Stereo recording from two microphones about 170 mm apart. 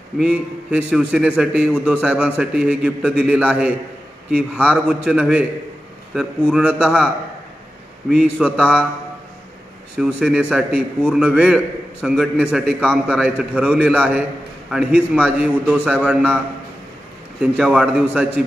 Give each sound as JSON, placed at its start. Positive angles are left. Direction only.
{"t": 0.2, "sound": "a man's voice", "side_deg": -5}
{"t": 8.1, "sound": "a man's voice", "side_deg": -5}
{"t": 9.9, "sound": "a man's voice", "side_deg": -5}
{"t": 15.2, "sound": "a man's voice", "side_deg": -5}
{"t": 17.4, "sound": "a man's voice", "side_deg": -5}